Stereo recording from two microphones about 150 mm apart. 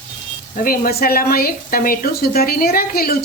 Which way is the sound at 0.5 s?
65° left (ahead or behind).